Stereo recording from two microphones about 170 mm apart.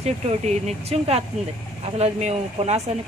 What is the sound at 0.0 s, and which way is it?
Speech, 40° right (ahead or behind).